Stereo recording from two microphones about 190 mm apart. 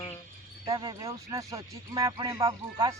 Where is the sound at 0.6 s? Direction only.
25° right (ahead or behind).